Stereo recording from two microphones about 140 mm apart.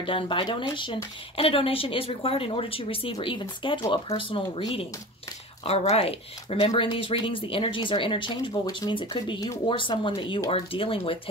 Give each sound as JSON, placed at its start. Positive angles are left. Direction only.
{"t": 0.0, "sound": "speech", "side_deg": 40}